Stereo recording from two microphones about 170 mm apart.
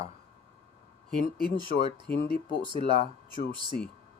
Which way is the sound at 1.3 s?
25° right (ahead or behind).